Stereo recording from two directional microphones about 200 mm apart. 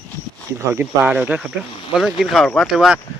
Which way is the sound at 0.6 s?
10° right (ahead or behind).